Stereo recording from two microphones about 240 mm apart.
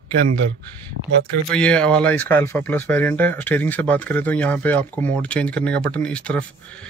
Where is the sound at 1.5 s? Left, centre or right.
Centre.